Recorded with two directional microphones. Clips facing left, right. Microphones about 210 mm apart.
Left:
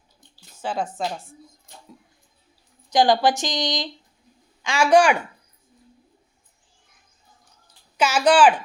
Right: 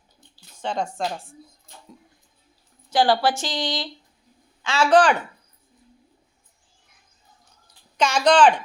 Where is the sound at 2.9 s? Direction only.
15° left (ahead or behind).